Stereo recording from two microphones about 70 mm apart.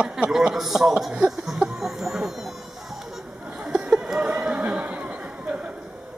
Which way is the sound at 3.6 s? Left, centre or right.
Centre.